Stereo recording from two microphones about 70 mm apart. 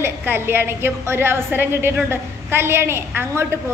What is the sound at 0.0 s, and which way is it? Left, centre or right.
A woman's voice, right.